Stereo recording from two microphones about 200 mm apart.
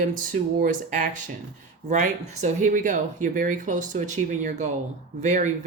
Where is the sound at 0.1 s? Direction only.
40° right (ahead or behind).